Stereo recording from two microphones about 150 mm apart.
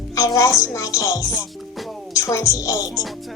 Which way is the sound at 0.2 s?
20° left (ahead or behind).